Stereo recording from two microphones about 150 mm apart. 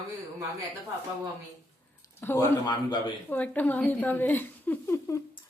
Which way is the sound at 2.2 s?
15° left (ahead or behind).